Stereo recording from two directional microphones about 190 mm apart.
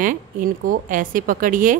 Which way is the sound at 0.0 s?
45° right (ahead or behind).